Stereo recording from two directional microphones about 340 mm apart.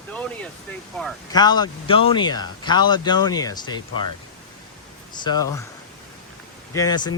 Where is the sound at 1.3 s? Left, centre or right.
Centre.